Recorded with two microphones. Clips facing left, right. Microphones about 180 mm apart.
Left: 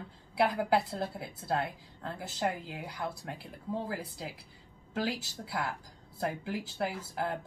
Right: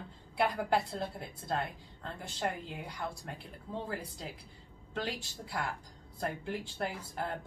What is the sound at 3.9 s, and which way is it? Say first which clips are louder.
A woman's voice: left 2 dB; 5° left (ahead or behind).